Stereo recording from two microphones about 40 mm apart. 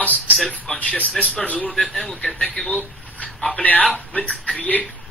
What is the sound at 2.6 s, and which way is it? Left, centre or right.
Speech, centre.